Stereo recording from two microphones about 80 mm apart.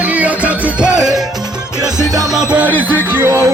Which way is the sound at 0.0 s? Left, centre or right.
Centre.